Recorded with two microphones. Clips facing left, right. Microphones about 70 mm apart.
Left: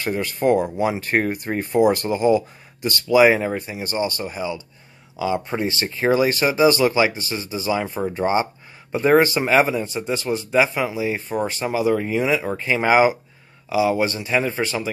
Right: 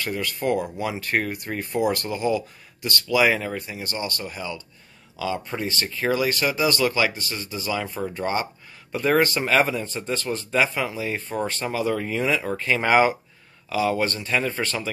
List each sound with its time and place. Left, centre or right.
0.0 s speech: left